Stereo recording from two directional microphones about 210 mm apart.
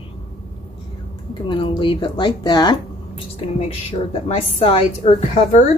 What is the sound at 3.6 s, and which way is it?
A woman's voice, 30° left (ahead or behind).